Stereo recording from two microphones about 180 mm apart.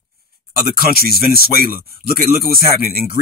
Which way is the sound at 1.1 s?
60° left (ahead or behind).